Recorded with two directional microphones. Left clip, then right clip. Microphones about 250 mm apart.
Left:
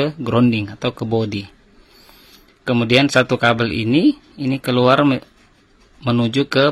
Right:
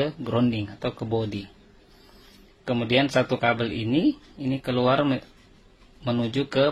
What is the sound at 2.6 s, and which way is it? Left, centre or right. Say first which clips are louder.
Speech: left 7 dB; left.